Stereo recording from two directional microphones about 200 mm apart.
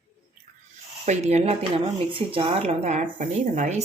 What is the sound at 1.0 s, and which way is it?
Speech, 35° right (ahead or behind).